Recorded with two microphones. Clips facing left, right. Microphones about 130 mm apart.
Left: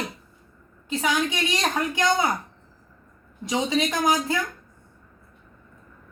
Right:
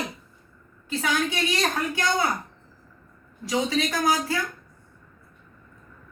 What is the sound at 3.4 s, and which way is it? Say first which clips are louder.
Speech: left 1 dB; 20° left (ahead or behind).